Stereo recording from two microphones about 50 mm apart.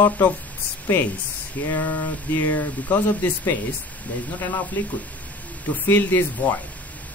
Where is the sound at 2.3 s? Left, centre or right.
Left.